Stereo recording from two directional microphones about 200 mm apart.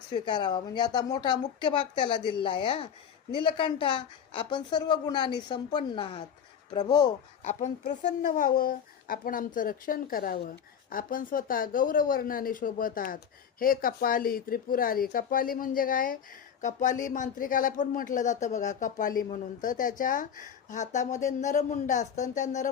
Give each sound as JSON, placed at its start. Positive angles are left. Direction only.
{"t": 0.1, "sound": "a woman's voice", "side_deg": 20}
{"t": 7.4, "sound": "speech", "side_deg": 35}